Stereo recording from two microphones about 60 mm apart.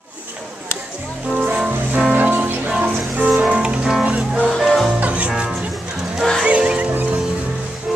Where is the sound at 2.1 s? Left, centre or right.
Right.